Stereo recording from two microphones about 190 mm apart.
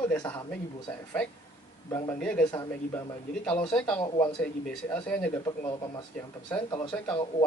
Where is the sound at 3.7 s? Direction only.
10° left (ahead or behind).